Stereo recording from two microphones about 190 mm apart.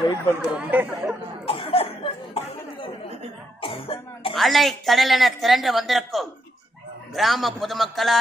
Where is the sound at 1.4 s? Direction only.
30° left (ahead or behind).